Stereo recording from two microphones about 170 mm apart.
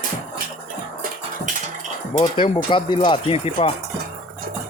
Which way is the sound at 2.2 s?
30° left (ahead or behind).